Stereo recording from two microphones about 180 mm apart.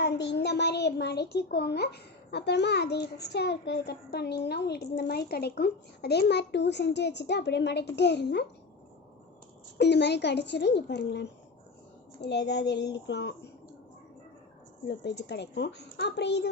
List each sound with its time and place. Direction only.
0.0 s a child's voice: 70° left (ahead or behind)
9.7 s a child's voice: 70° left (ahead or behind)
14.8 s a child's voice: 70° left (ahead or behind)